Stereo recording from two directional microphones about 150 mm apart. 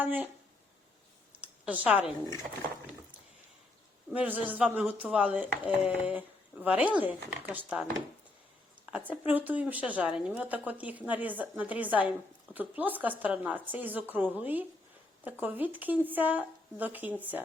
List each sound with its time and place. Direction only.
0.0 s speech: 10° right (ahead or behind)
1.6 s speech: 10° right (ahead or behind)
4.1 s speech: 10° right (ahead or behind)
8.9 s speech: 10° right (ahead or behind)